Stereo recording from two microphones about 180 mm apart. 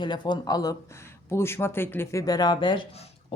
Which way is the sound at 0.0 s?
25° left (ahead or behind).